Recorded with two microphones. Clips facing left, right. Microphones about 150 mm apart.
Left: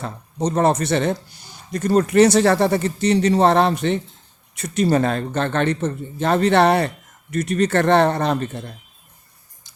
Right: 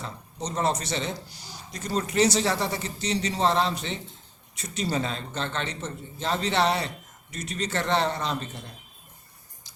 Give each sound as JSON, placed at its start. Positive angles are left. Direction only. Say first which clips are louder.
{"t": 0.0, "sound": "a man's voice", "louder": "left 11 dB", "side_deg": 55}